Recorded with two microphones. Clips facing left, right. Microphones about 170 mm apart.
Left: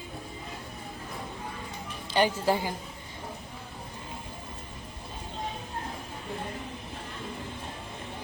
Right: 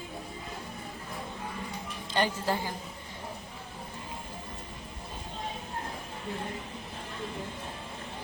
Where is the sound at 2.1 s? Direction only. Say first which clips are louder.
Left 4 dB; 10° left (ahead or behind).